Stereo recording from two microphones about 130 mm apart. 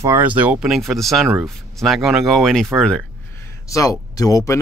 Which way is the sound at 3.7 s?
25° left (ahead or behind).